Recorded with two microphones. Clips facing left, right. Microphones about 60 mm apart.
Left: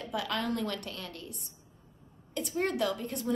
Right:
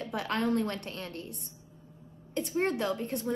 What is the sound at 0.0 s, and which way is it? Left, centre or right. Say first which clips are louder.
A woman's voice: right 2 dB; right.